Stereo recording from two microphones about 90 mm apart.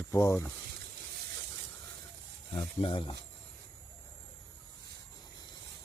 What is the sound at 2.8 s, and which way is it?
Speech, 65° left (ahead or behind).